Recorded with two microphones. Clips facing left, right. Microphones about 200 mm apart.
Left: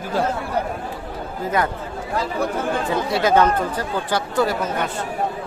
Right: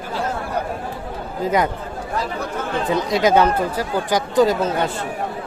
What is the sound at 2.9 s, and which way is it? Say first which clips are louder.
Speech: right 2 dB; 15° right (ahead or behind).